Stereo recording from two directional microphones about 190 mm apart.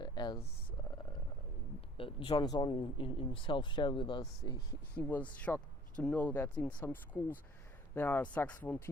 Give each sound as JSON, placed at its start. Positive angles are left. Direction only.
{"t": 0.0, "sound": "a sound", "side_deg": 20}
{"t": 2.0, "sound": "speech", "side_deg": 25}
{"t": 4.9, "sound": "speech", "side_deg": 10}